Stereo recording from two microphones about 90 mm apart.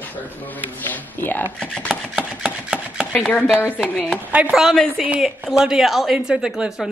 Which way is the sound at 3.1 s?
15° left (ahead or behind).